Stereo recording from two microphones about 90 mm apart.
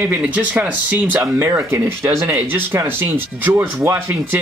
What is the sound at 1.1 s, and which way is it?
Speech, 30° right (ahead or behind).